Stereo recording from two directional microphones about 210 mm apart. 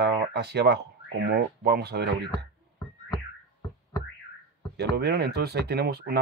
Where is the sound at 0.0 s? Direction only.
50° right (ahead or behind).